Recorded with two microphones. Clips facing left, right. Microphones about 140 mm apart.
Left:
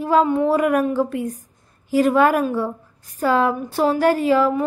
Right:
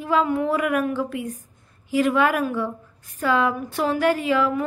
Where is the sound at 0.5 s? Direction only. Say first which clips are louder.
Left 5 dB; 35° left (ahead or behind).